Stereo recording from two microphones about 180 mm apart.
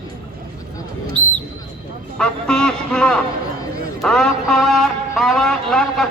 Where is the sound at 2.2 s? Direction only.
5° left (ahead or behind).